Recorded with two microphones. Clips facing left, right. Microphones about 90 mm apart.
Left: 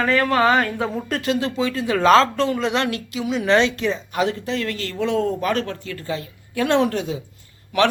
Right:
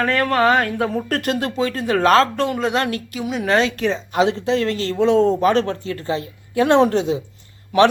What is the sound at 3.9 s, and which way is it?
Speech, 25° right (ahead or behind).